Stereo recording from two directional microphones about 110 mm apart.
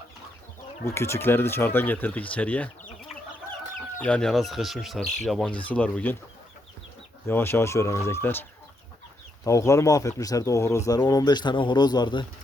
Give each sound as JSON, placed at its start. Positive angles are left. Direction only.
{"t": 0.9, "sound": "speech", "side_deg": 25}
{"t": 4.0, "sound": "speech", "side_deg": 10}
{"t": 7.3, "sound": "speech", "side_deg": 20}